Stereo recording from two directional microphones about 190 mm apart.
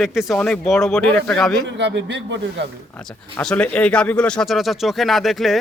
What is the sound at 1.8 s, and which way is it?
Speech, 65° right (ahead or behind).